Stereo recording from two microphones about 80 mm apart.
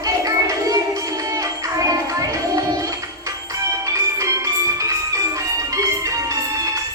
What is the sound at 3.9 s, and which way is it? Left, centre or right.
Music, right.